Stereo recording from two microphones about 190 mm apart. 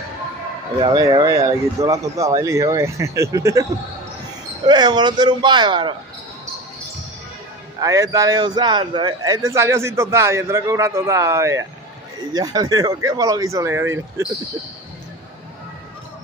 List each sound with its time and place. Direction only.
0.7 s speech: 20° right (ahead or behind)
4.6 s speech: 20° right (ahead or behind)
7.8 s speech: 20° right (ahead or behind)